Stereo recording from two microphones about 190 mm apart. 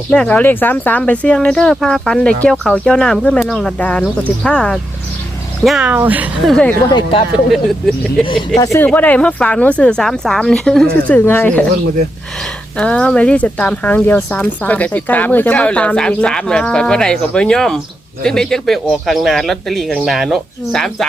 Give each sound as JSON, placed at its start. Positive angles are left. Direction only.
{"t": 0.1, "sound": "speech", "side_deg": 5}
{"t": 6.8, "sound": "speech", "side_deg": 25}
{"t": 7.5, "sound": "speech", "side_deg": 0}
{"t": 8.2, "sound": "speech", "side_deg": 20}
{"t": 12.7, "sound": "speech", "side_deg": 5}